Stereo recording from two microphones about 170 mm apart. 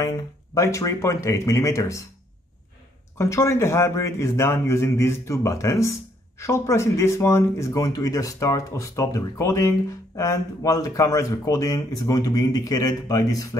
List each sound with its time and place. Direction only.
0.6 s a man's voice: 15° left (ahead or behind)
3.2 s a man's voice: 15° left (ahead or behind)